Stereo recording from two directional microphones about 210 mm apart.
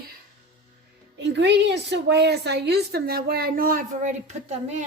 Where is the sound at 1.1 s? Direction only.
55° right (ahead or behind).